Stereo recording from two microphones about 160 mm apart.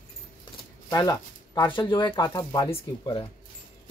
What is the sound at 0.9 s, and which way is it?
Speech, 25° left (ahead or behind).